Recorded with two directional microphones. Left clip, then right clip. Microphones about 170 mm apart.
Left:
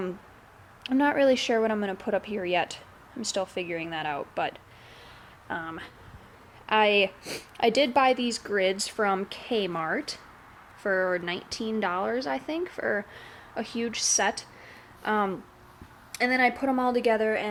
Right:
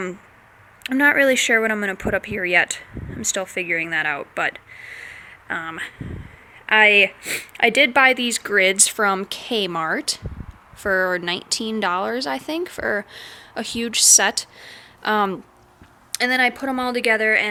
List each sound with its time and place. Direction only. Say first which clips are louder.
0.9 s speech: right 7 dB; 10° right (ahead or behind); by 15.4 s 30° right (ahead or behind)
16.1 s speech: right 5 dB; 5° right (ahead or behind)